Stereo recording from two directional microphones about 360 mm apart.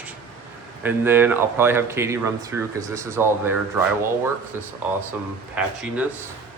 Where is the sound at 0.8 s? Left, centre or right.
Centre.